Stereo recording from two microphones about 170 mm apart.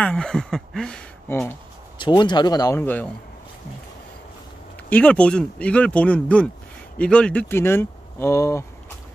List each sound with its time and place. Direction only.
0.0 s speech: 5° left (ahead or behind)
2.0 s speech: 25° left (ahead or behind); by 3.1 s 10° left (ahead or behind)
4.8 s speech: 10° left (ahead or behind)